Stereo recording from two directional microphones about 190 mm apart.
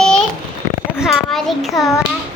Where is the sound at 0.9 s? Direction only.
Centre (ahead or behind).